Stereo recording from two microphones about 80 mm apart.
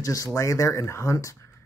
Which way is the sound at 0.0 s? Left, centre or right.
Left.